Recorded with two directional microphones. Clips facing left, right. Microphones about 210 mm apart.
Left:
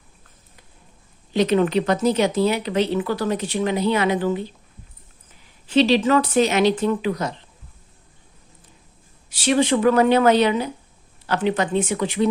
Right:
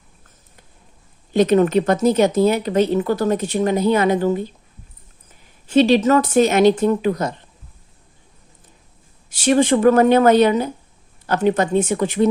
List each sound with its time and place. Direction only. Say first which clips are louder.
1.3 s speech: right 4 dB; 45° right (ahead or behind)
5.6 s speech: right 3 dB; 50° right (ahead or behind)
9.3 s speech: right 3 dB; 45° right (ahead or behind)